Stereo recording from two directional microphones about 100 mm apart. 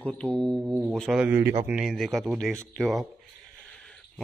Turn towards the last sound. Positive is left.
turn(degrees=0)  # may be behind; listen again after turning